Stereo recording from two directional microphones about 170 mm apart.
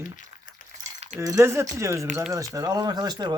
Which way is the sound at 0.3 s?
40° right (ahead or behind).